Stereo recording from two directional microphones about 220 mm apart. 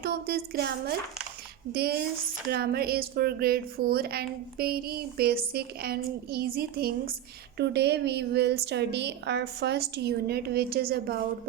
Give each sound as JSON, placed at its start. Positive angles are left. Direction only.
{"t": 0.0, "sound": "a woman's voice", "side_deg": -45}